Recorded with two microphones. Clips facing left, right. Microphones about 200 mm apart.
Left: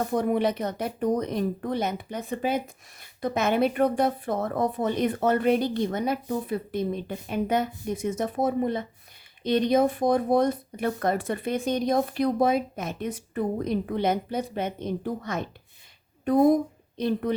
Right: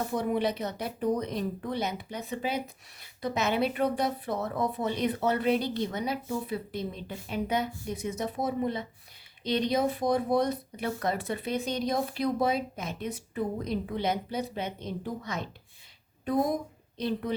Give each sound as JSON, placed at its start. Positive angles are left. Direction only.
{"t": 0.1, "sound": "speech", "side_deg": 50}
{"t": 17.0, "sound": "speech", "side_deg": 50}